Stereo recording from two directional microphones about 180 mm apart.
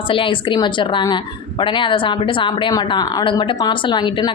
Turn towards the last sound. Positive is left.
turn(degrees=25)  # may be behind; listen again after turning